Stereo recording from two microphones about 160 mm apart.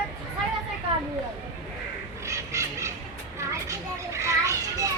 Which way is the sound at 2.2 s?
20° right (ahead or behind).